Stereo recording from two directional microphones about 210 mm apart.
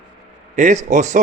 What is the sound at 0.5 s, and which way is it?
Speech, 35° right (ahead or behind).